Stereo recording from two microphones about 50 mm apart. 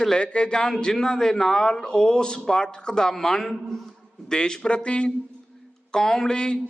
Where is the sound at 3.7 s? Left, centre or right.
Centre.